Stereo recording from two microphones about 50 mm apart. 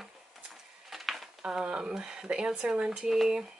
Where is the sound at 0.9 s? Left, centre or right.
Centre.